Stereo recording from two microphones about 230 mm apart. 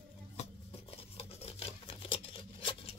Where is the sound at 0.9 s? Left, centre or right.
Left.